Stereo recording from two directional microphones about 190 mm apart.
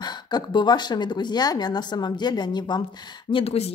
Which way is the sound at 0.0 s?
20° left (ahead or behind).